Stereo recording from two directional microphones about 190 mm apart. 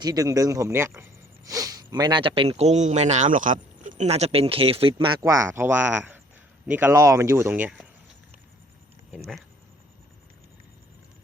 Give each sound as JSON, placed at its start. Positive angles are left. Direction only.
{"t": 0.0, "sound": "speech", "side_deg": -20}
{"t": 9.1, "sound": "speech", "side_deg": 0}